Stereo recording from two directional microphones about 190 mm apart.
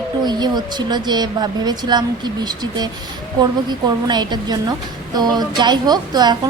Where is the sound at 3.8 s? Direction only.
20° right (ahead or behind).